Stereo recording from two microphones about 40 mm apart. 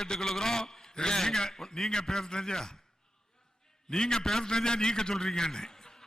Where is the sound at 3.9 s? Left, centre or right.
Centre.